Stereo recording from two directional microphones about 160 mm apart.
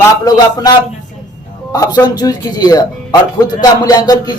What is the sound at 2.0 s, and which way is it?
Speech, 25° left (ahead or behind).